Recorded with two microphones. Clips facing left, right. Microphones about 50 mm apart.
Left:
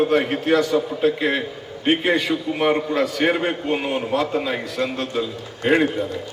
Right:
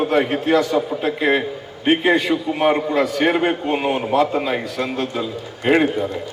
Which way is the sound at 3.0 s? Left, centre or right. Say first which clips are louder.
Right 2 dB; right.